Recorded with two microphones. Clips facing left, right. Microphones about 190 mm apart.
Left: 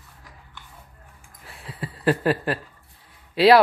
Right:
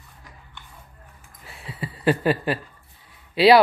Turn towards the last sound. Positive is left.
turn(degrees=0)  # may be behind; listen again after turning